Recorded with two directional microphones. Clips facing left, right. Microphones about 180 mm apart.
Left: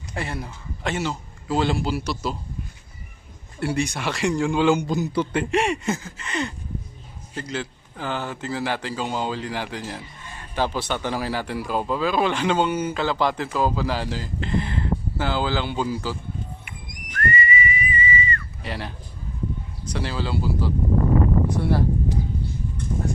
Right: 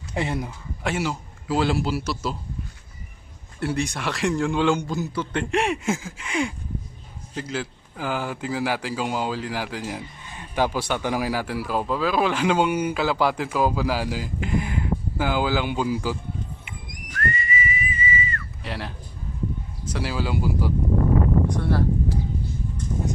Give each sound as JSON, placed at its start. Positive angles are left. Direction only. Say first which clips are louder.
{"t": 0.1, "sound": "a man's voice", "louder": "right 4 dB", "side_deg": -20}
{"t": 0.9, "sound": "a man's voice", "louder": "right 1 dB", "side_deg": -5}
{"t": 3.6, "sound": "a man's voice", "louder": "left 1 dB", "side_deg": 0}
{"t": 4.9, "sound": "a man's voice", "louder": "left 4 dB", "side_deg": 15}
{"t": 5.4, "sound": "speech", "louder": "right 2 dB", "side_deg": 0}
{"t": 17.2, "sound": "whistling", "louder": "left 3 dB", "side_deg": 0}
{"t": 19.9, "sound": "speech", "louder": "right 1 dB", "side_deg": -10}
{"t": 21.5, "sound": "a man's voice", "louder": "left 1 dB", "side_deg": 10}